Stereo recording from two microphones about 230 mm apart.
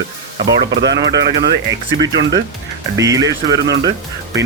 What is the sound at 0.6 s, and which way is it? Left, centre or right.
Speech, right.